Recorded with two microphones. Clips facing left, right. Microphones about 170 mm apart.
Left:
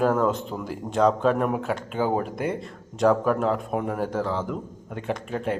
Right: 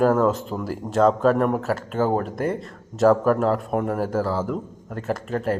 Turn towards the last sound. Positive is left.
turn(degrees=0)  # may be behind; listen again after turning